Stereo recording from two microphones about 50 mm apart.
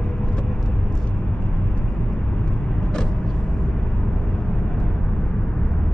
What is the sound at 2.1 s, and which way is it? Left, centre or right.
Vehicle, centre.